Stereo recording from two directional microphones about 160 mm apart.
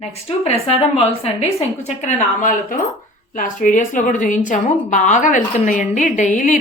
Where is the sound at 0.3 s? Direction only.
40° left (ahead or behind).